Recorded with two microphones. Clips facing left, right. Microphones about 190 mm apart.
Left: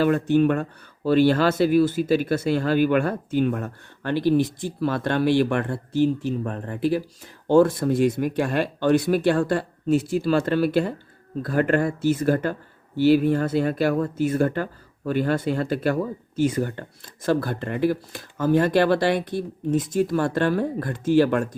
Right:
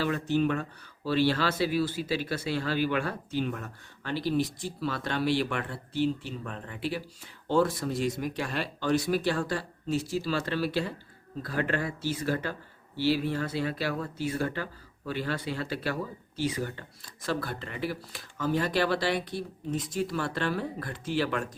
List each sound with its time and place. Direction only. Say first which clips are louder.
0.0 s speech: left 8 dB; 55° left (ahead or behind)